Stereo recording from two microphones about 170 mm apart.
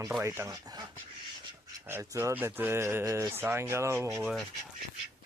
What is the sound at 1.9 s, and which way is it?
Speech, 15° right (ahead or behind).